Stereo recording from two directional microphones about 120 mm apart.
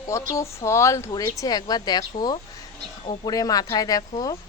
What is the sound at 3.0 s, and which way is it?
A woman's voice, 30° left (ahead or behind).